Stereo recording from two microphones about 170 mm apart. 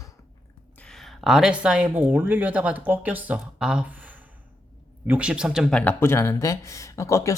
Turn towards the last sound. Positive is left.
turn(degrees=20)  # may be behind; listen again after turning